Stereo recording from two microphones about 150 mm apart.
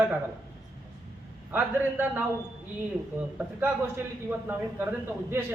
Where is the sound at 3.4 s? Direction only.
10° right (ahead or behind).